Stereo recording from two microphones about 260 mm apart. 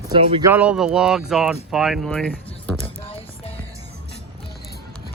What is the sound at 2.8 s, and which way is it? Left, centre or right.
Music, left.